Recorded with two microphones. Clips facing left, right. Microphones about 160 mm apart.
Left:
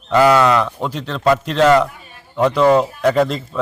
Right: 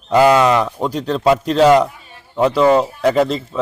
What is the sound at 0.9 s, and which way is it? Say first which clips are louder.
Speech: right 6 dB; 35° right (ahead or behind).